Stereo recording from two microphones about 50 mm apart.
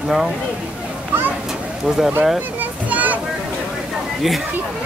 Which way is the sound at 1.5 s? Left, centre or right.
Centre.